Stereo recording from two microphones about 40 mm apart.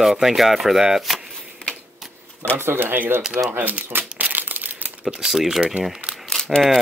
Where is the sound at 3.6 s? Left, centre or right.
Right.